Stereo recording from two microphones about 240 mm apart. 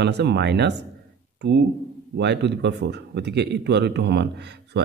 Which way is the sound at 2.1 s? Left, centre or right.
Right.